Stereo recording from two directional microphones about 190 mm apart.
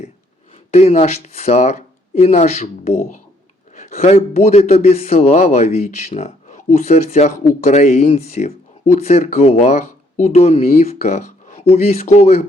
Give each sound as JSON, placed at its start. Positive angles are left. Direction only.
{"t": 0.7, "sound": "a man's voice", "side_deg": 35}